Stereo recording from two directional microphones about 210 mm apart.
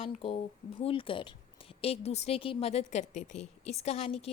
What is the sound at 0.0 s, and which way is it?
A woman's voice, 30° left (ahead or behind).